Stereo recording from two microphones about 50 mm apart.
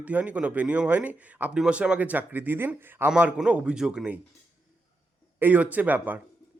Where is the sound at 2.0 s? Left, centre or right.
Right.